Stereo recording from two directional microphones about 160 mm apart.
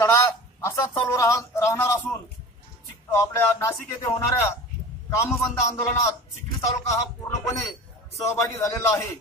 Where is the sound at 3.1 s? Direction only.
15° left (ahead or behind).